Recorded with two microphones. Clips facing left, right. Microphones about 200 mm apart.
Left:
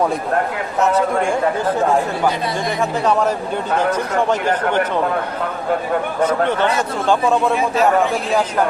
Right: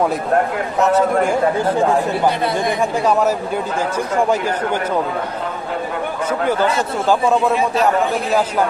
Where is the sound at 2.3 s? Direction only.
55° right (ahead or behind).